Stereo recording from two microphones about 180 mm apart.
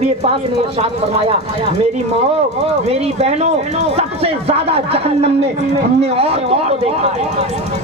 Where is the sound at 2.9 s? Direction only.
35° right (ahead or behind).